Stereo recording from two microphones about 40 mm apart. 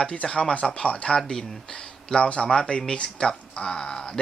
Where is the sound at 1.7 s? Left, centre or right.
Left.